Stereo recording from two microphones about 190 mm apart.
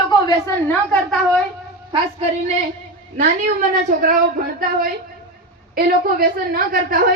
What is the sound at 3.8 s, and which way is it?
Speech, 45° right (ahead or behind).